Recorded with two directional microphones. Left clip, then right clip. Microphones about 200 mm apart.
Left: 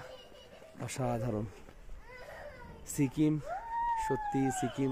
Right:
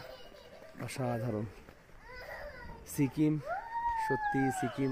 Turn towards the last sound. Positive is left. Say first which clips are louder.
# even
turn(degrees=10)  # may be behind; listen again after turning